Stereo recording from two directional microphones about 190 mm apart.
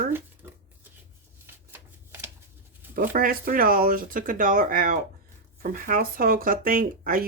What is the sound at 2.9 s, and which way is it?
Speech, 50° right (ahead or behind).